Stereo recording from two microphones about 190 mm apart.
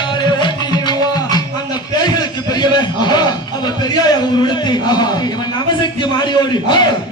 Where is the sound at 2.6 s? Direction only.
25° left (ahead or behind).